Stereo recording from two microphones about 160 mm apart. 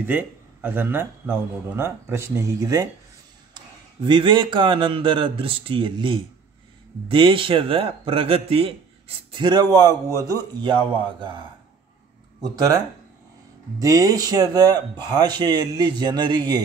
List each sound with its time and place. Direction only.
0.0 s a man's voice: 10° right (ahead or behind)
4.0 s a man's voice: 30° right (ahead or behind)